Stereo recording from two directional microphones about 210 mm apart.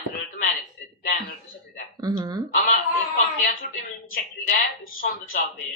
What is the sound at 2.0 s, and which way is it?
Speech, 20° right (ahead or behind).